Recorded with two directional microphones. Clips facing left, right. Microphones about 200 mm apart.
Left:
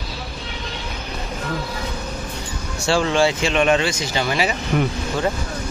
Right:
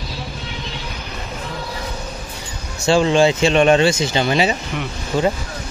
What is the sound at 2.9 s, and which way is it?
Speech, 20° right (ahead or behind).